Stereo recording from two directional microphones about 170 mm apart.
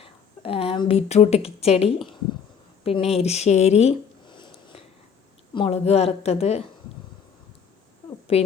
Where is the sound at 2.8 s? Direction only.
35° left (ahead or behind).